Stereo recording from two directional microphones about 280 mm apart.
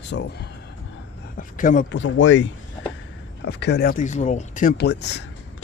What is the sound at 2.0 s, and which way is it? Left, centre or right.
Speech, left.